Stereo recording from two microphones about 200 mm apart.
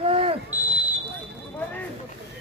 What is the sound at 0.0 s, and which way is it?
Smoke detector, 30° right (ahead or behind).